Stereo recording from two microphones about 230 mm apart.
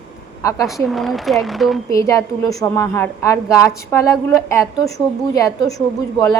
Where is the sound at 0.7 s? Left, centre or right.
Centre.